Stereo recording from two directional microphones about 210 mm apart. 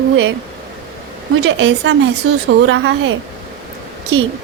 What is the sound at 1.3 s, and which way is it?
A woman's voice, 65° right (ahead or behind).